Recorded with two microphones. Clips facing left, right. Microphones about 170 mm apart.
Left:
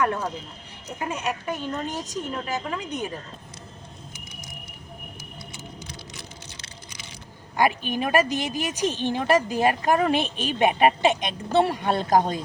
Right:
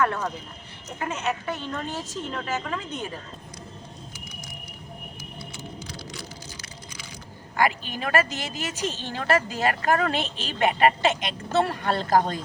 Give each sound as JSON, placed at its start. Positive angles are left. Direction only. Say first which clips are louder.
{"t": 0.0, "sound": "speech", "louder": "even", "side_deg": 15}
{"t": 7.5, "sound": "speech", "louder": "left 2 dB", "side_deg": 15}